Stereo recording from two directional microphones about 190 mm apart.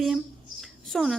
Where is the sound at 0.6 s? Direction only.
Centre (ahead or behind).